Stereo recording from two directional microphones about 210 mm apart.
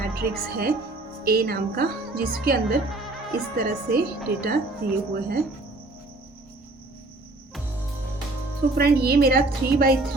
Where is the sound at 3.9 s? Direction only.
45° right (ahead or behind).